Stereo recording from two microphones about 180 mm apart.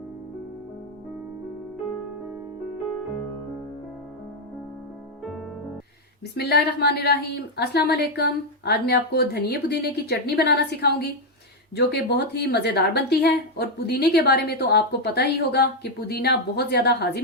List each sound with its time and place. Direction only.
6.3 s a woman's voice: 65° left (ahead or behind)